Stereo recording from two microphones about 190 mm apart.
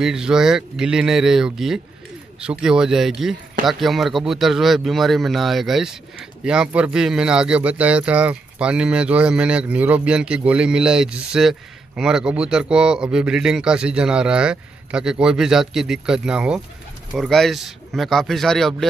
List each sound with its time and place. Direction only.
0.0 s speech: 5° right (ahead or behind)